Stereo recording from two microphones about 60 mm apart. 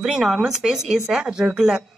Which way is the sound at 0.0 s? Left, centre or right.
Centre.